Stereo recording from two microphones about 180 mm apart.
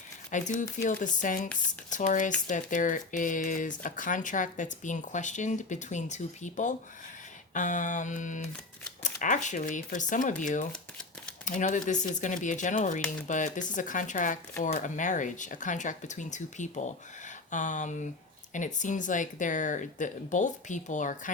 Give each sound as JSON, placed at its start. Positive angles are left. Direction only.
{"t": 0.3, "sound": "speech", "side_deg": 45}
{"t": 10.7, "sound": "typewriter", "side_deg": 5}
{"t": 11.4, "sound": "speech", "side_deg": 45}